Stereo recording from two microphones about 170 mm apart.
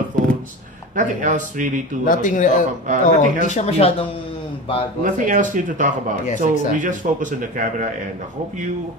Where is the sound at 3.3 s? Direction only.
45° left (ahead or behind).